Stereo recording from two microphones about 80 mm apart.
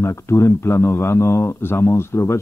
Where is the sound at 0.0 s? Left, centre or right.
Left.